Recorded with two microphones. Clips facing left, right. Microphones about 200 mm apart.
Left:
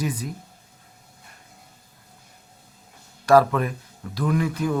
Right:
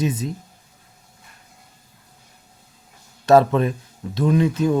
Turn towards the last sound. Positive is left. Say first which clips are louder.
# right 5 dB
turn(degrees=-25)  # may be behind; listen again after turning